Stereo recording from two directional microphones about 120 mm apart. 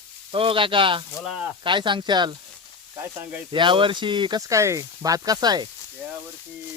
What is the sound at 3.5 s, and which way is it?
Speech, 45° right (ahead or behind).